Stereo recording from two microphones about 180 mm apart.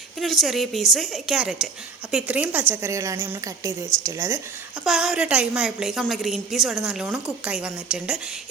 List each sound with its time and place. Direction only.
0.2 s a woman's voice: centre (ahead or behind); by 4.4 s 15° right (ahead or behind)
4.8 s a woman's voice: 5° right (ahead or behind)